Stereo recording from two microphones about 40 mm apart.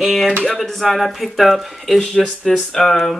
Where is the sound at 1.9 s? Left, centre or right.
Centre.